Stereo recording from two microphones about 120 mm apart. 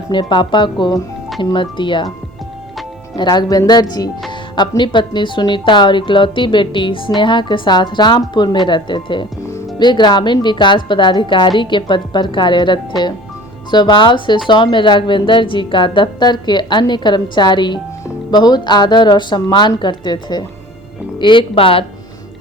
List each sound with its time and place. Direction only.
0.1 s a woman's voice: 40° left (ahead or behind)
3.2 s a woman's voice: 35° left (ahead or behind)
4.3 s music: 40° left (ahead or behind)
4.8 s a woman's voice: 40° left (ahead or behind)